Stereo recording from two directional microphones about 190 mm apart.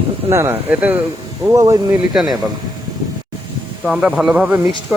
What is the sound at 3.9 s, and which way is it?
Speech, 5° right (ahead or behind).